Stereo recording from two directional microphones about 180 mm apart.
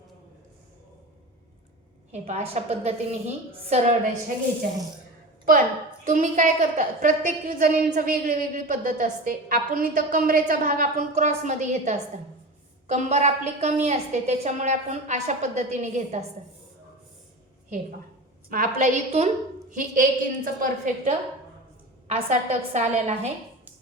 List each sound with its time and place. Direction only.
2.1 s a woman's voice: 40° right (ahead or behind)
6.1 s a woman's voice: 45° right (ahead or behind)
18.5 s a woman's voice: 50° right (ahead or behind)